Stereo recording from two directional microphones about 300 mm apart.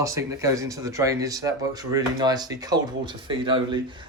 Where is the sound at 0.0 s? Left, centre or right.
Centre.